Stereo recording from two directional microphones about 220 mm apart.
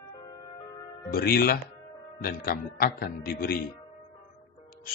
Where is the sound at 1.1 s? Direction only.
45° left (ahead or behind).